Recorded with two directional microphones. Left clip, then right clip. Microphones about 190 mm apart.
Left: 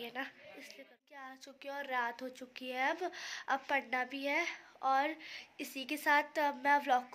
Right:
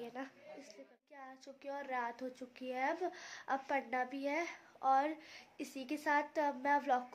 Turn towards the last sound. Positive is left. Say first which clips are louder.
# left 3 dB
turn(degrees=0)  # may be behind; listen again after turning